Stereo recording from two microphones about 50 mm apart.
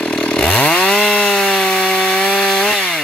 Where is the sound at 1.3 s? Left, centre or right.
Centre.